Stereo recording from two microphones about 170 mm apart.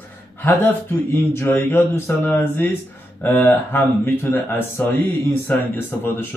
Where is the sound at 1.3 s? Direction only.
15° left (ahead or behind).